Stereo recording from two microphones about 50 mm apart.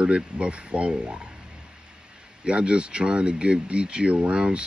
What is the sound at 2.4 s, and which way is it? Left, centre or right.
Speech, centre.